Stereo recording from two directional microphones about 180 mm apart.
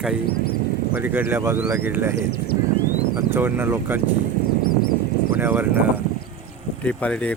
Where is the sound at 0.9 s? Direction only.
10° right (ahead or behind).